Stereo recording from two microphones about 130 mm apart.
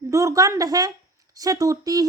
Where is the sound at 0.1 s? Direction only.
25° right (ahead or behind).